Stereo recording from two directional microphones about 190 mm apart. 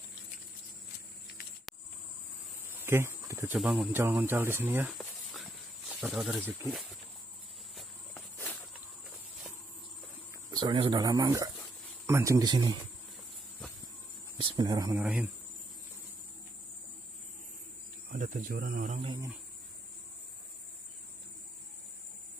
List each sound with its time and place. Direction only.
2.6 s insect: 10° right (ahead or behind)
3.5 s speech: centre (ahead or behind)
4.9 s a sound: centre (ahead or behind)
5.9 s speech: 5° right (ahead or behind)
10.5 s speech: 25° right (ahead or behind)
14.4 s speech: 25° right (ahead or behind)
15.0 s speech: 10° right (ahead or behind)
18.1 s speech: 45° right (ahead or behind)
18.9 s speech: 25° right (ahead or behind)